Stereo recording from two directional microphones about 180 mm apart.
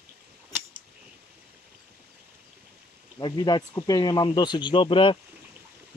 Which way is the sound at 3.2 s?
25° left (ahead or behind).